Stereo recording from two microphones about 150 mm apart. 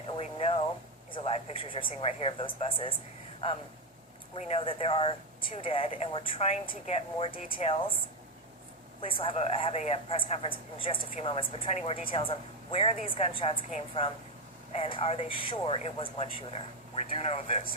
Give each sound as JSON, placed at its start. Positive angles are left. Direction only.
{"t": 0.2, "sound": "a sound", "side_deg": 45}
{"t": 1.1, "sound": "speech", "side_deg": 40}
{"t": 4.4, "sound": "speech", "side_deg": 45}
{"t": 7.3, "sound": "speech", "side_deg": 70}
{"t": 7.6, "sound": "speech", "side_deg": 35}
{"t": 12.0, "sound": "a woman's voice", "side_deg": 40}